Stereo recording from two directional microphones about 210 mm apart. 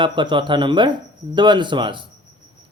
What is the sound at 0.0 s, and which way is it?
Speech, 20° right (ahead or behind).